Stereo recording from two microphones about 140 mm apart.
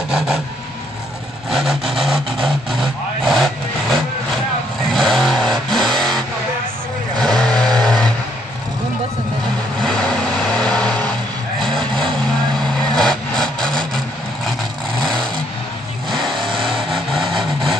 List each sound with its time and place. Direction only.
1.5 s vehicle: centre (ahead or behind)
10.5 s vehicle: 5° left (ahead or behind)
12.9 s vehicle: 5° left (ahead or behind)
15.0 s vehicle: 35° right (ahead or behind)
16.3 s vehicle: 35° right (ahead or behind)
16.9 s vehicle: centre (ahead or behind)